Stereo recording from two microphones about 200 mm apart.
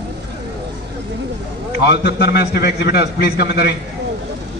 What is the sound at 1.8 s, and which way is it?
A man's voice, 55° left (ahead or behind).